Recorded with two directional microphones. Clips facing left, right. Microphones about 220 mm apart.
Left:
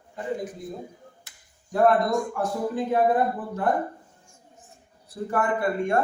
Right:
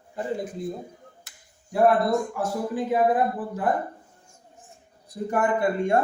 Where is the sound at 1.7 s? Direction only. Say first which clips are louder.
Right 1 dB; 5° right (ahead or behind).